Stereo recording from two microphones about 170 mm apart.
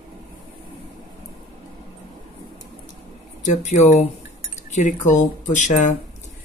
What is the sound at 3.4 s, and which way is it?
Speech, 45° left (ahead or behind).